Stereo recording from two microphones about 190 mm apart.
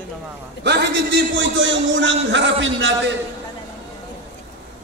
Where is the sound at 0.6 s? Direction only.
65° right (ahead or behind).